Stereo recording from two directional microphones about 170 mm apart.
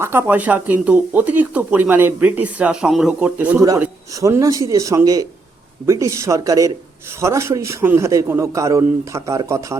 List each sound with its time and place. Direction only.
0.0 s speech: 10° right (ahead or behind)